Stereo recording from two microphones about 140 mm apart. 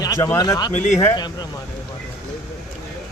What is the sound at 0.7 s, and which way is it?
Speech, 55° left (ahead or behind).